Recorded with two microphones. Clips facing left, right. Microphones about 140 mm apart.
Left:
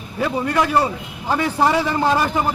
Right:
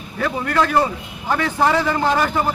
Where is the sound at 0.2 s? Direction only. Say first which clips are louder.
Even; 15° left (ahead or behind).